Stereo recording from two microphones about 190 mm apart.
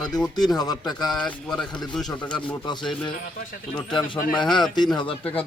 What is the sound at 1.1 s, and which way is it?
Speech, 5° left (ahead or behind).